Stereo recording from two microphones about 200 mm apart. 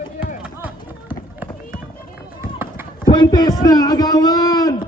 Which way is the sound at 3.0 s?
20° left (ahead or behind).